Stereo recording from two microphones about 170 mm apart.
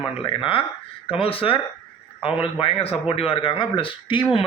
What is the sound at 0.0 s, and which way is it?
A man's voice, 30° left (ahead or behind).